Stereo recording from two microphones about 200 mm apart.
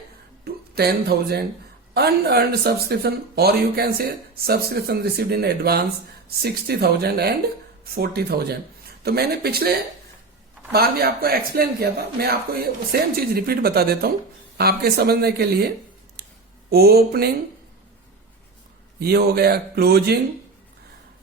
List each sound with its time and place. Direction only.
0.4 s speech: 50° right (ahead or behind)
18.9 s speech: 50° right (ahead or behind)